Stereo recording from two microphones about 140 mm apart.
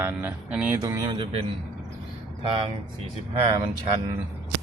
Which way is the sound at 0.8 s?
25° right (ahead or behind).